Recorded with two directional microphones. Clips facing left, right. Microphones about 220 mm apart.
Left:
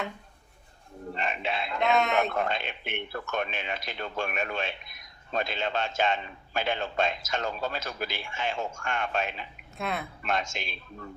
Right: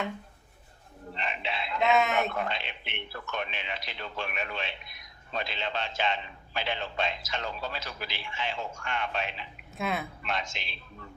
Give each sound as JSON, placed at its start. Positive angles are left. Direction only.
{"t": 1.1, "sound": "speech", "side_deg": 45}
{"t": 1.8, "sound": "speech", "side_deg": 0}
{"t": 2.3, "sound": "speech", "side_deg": 50}
{"t": 9.7, "sound": "speech", "side_deg": 0}
{"t": 10.2, "sound": "speech", "side_deg": 45}